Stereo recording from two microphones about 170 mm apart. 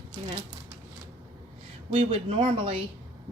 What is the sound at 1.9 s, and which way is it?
Speech, 35° right (ahead or behind).